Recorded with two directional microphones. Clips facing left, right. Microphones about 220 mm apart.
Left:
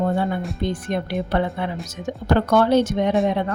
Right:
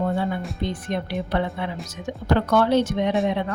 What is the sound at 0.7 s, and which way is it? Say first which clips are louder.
Speech: left 3 dB; 50° left (ahead or behind).